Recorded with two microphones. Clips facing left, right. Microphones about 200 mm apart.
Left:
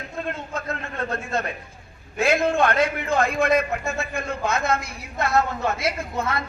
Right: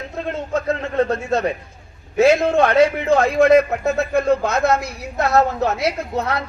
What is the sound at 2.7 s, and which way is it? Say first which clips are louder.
A man's voice: right 7 dB; 65° right (ahead or behind).